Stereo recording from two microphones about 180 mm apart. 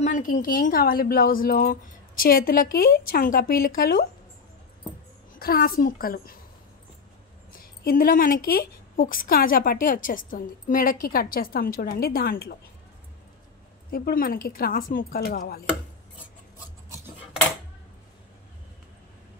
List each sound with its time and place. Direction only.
0.0 s a woman's voice: 45° left (ahead or behind)
5.4 s a woman's voice: 55° left (ahead or behind)
7.5 s a woman's voice: 55° left (ahead or behind)
13.8 s a woman's voice: 55° left (ahead or behind)